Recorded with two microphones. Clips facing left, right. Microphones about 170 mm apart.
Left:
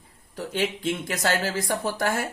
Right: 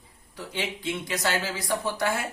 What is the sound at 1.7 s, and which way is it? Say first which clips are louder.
Speech: right 1 dB; 45° left (ahead or behind).